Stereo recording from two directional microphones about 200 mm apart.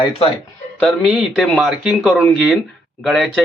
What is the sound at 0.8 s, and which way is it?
Speech, centre (ahead or behind).